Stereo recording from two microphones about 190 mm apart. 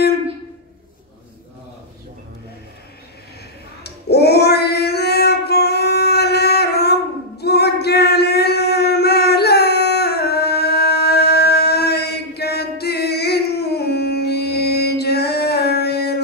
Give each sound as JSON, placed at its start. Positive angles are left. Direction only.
{"t": 3.8, "sound": "singing", "side_deg": 60}